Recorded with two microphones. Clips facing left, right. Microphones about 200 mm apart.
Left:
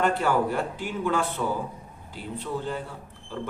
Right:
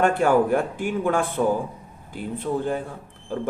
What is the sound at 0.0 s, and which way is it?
Speech, 50° right (ahead or behind).